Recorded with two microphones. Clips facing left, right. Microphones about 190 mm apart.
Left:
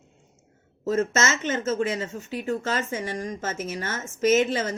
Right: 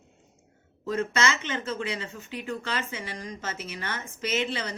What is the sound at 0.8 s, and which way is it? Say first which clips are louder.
Speech: left 3 dB; 45° left (ahead or behind).